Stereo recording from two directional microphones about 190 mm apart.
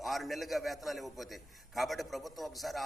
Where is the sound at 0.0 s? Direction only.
Centre (ahead or behind).